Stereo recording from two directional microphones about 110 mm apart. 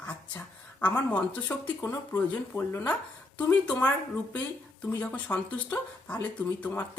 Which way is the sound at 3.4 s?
10° left (ahead or behind).